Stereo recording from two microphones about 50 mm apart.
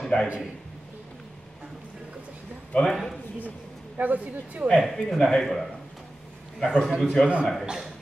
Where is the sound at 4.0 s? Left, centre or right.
Right.